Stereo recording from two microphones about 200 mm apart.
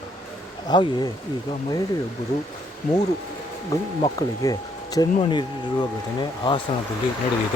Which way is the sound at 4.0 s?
20° left (ahead or behind).